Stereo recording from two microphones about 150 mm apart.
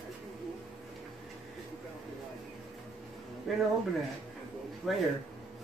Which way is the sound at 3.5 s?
Centre (ahead or behind).